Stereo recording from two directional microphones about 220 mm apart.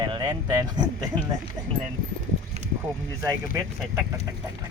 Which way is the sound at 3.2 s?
15° right (ahead or behind).